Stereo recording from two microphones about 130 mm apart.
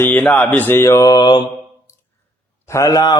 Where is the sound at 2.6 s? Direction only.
25° left (ahead or behind).